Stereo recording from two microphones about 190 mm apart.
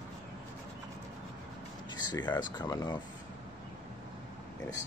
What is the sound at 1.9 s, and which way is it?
Speech, 20° left (ahead or behind).